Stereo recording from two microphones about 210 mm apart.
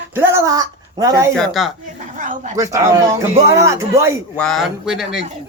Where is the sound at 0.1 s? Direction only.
10° right (ahead or behind).